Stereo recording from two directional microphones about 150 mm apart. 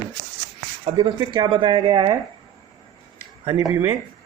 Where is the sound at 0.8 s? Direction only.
30° right (ahead or behind).